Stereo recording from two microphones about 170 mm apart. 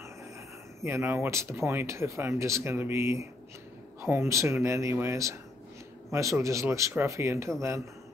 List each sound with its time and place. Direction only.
0.7 s speech: 15° right (ahead or behind)